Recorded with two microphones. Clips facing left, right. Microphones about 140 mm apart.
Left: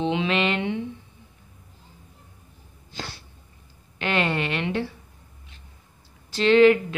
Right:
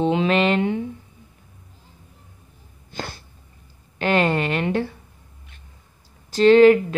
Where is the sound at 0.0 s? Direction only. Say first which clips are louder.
Right 5 dB; 45° right (ahead or behind).